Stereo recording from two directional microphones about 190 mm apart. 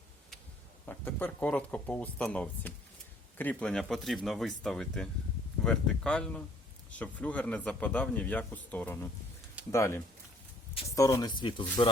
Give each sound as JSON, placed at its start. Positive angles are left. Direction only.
{"t": 0.9, "sound": "speech", "side_deg": 10}